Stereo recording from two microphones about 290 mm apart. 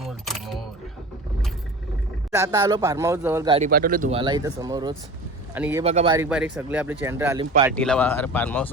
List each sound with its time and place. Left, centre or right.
0.0 s single-lens reflex camera: centre
2.3 s speech: centre
3.7 s speech: right; by 5.8 s centre
5.8 s speech: right
6.1 s speech: centre
7.8 s speech: centre